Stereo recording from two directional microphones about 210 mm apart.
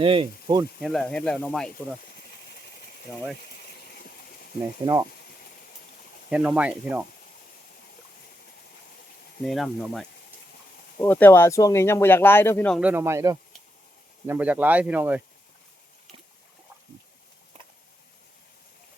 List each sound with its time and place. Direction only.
0.0 s speech: 25° right (ahead or behind)
0.8 s speech: centre (ahead or behind)
3.1 s speech: 10° left (ahead or behind)
6.3 s speech: 5° right (ahead or behind)
9.4 s speech: centre (ahead or behind)
12.8 s speech: 10° right (ahead or behind)